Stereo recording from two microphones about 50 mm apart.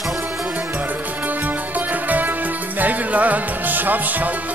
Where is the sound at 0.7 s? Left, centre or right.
Right.